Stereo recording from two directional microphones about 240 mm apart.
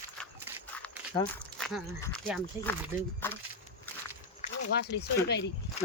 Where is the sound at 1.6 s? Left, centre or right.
Centre.